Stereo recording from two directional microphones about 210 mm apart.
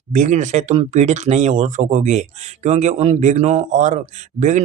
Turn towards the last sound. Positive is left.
turn(degrees=-35)  # may be behind; listen again after turning